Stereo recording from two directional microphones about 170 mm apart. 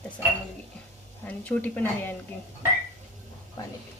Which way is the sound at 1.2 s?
10° left (ahead or behind).